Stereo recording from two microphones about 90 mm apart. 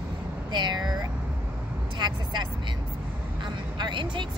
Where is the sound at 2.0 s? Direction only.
55° right (ahead or behind).